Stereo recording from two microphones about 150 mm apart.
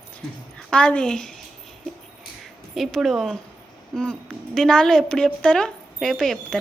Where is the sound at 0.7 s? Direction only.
5° left (ahead or behind).